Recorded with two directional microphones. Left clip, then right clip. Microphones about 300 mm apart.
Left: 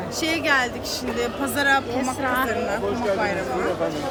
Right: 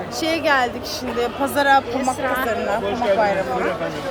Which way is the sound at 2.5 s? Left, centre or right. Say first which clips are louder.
Right 3 dB; centre.